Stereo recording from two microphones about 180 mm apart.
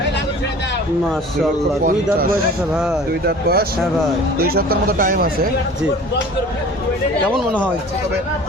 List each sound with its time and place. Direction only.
1.8 s speech: 50° right (ahead or behind)